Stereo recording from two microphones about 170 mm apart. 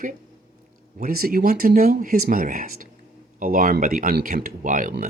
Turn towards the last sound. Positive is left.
turn(degrees=-50)  # may be behind; listen again after turning